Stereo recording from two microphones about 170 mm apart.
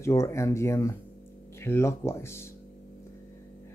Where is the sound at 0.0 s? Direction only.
15° left (ahead or behind).